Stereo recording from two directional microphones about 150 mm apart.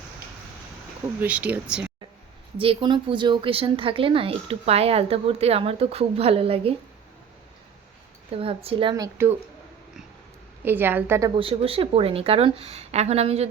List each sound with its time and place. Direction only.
1.2 s speech: 10° right (ahead or behind)
2.6 s speech: 35° right (ahead or behind)
8.3 s speech: 40° right (ahead or behind)
9.0 s speech: 15° right (ahead or behind)
10.6 s speech: 15° right (ahead or behind)
11.3 s speech: 40° right (ahead or behind)